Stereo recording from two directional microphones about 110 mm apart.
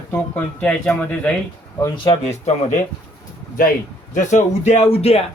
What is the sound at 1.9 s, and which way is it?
Speech, 50° left (ahead or behind).